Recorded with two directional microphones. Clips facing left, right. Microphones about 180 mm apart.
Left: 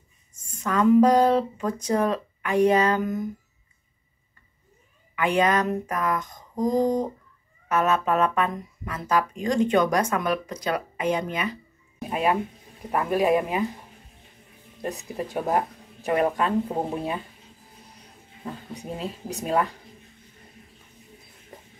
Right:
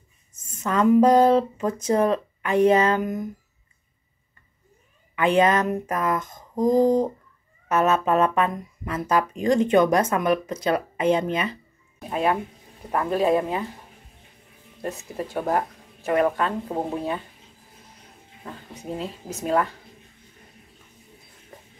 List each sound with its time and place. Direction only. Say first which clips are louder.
0.3 s speech: right 1 dB; 25° right (ahead or behind)
5.1 s speech: right 3 dB; 25° right (ahead or behind)
12.1 s speech: right 1 dB; 15° left (ahead or behind)
14.8 s speech: even; 15° left (ahead or behind)
18.4 s speech: left 3 dB; 15° left (ahead or behind)